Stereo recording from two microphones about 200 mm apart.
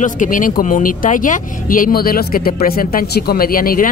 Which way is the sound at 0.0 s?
40° left (ahead or behind).